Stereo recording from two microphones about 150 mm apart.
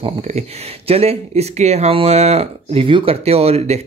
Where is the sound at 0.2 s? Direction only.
45° right (ahead or behind).